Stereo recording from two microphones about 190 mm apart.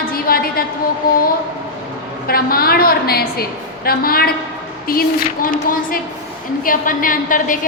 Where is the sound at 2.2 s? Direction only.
50° left (ahead or behind).